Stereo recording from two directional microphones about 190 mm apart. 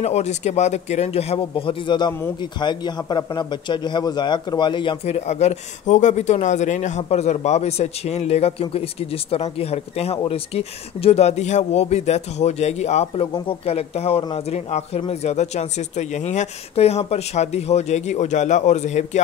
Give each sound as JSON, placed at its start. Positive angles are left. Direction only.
{"t": 0.0, "sound": "speech", "side_deg": 35}